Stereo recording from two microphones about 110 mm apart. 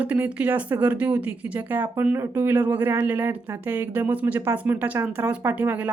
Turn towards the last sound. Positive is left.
turn(degrees=-15)  # may be behind; listen again after turning